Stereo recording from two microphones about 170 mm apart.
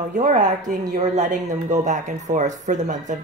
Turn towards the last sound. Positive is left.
turn(degrees=-45)  # may be behind; listen again after turning